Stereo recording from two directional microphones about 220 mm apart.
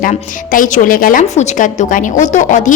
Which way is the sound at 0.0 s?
35° left (ahead or behind).